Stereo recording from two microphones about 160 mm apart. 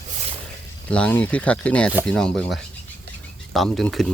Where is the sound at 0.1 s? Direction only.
45° right (ahead or behind).